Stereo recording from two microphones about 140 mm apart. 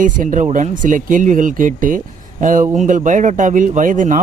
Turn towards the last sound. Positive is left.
turn(degrees=-70)  # may be behind; listen again after turning